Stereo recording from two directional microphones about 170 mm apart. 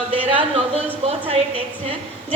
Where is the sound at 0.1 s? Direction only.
30° right (ahead or behind).